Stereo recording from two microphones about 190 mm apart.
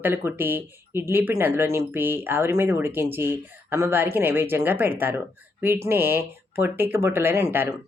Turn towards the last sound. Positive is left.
turn(degrees=-10)  # may be behind; listen again after turning